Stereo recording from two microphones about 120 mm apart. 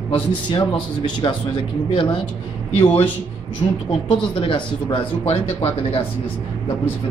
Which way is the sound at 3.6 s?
50° left (ahead or behind).